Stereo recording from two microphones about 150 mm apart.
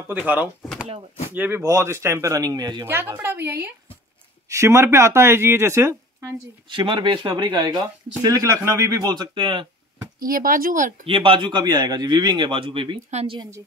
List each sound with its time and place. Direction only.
0.1 s speech: 10° right (ahead or behind)
6.7 s a man's voice: 30° right (ahead or behind)
10.1 s speech: 70° right (ahead or behind)
11.1 s a man's voice: 35° right (ahead or behind)